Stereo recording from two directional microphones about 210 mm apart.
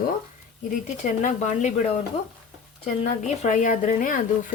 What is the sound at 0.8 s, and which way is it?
Speech, 35° left (ahead or behind).